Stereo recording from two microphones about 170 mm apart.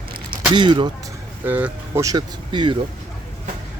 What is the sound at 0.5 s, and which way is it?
Speech, 30° right (ahead or behind).